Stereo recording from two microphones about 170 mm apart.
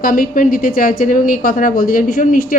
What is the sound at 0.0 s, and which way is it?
A woman's voice, 55° left (ahead or behind).